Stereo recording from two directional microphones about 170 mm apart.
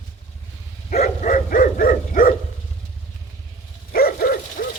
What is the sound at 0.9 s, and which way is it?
Dog, 50° left (ahead or behind).